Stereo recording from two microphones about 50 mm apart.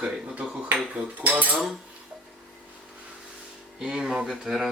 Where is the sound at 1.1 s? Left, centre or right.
Right.